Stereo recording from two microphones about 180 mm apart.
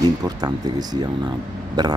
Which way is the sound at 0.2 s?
20° right (ahead or behind).